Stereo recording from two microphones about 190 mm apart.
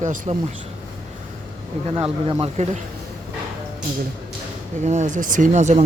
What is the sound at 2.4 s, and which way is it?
Speech, 35° right (ahead or behind).